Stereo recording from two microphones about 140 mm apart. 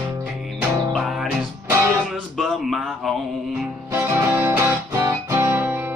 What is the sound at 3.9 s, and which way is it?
Music, 15° right (ahead or behind).